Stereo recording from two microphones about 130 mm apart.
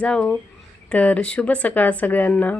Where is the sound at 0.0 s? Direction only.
5° left (ahead or behind).